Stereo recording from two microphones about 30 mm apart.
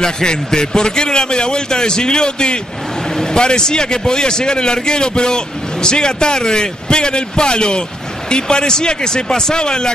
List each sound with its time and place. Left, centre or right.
0.0 s a man's voice: left